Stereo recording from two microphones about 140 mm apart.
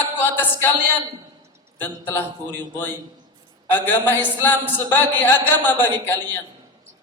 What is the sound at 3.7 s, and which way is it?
Speech, 15° left (ahead or behind).